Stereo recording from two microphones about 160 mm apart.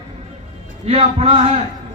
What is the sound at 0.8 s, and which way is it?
Speech, 35° right (ahead or behind).